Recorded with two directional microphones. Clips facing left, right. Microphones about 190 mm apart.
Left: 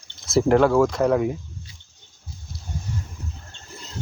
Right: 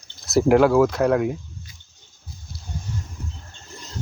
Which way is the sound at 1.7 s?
30° left (ahead or behind).